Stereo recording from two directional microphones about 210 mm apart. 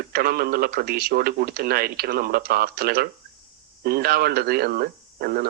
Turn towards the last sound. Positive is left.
turn(degrees=-50)  # may be behind; listen again after turning